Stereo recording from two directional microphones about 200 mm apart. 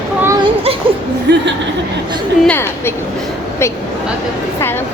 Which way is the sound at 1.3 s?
60° right (ahead or behind).